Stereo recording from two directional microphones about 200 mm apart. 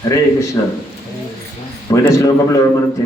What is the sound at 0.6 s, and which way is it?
Speech, 15° left (ahead or behind).